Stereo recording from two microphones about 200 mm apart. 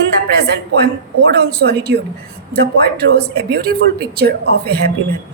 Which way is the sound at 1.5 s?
55° right (ahead or behind).